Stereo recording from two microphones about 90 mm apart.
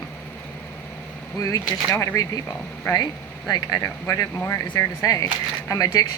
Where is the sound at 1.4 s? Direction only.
40° left (ahead or behind).